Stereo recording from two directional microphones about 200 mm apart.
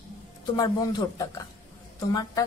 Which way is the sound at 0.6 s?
20° left (ahead or behind).